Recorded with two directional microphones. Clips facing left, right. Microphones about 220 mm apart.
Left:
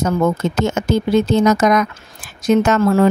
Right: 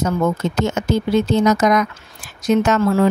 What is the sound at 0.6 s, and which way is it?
Speech, 50° left (ahead or behind).